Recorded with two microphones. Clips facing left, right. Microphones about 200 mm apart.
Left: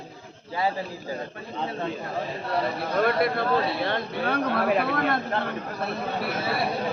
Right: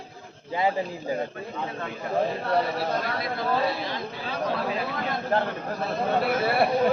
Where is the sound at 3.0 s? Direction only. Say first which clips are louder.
Left 7 dB; 60° left (ahead or behind).